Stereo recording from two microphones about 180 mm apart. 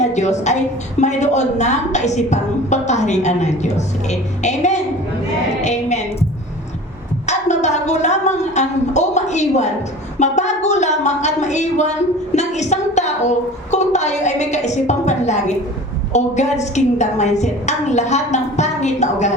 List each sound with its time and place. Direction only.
0.0 s a woman's voice: 40° left (ahead or behind)
7.3 s a sound: 40° left (ahead or behind)
10.2 s a woman's voice: 40° left (ahead or behind)